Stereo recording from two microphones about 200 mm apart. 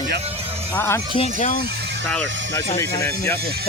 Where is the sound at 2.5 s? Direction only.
15° left (ahead or behind).